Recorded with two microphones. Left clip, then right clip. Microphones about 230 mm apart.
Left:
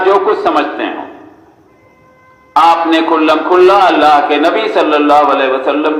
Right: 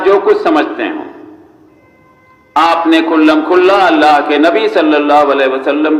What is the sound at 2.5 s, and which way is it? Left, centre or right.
A man's voice, right.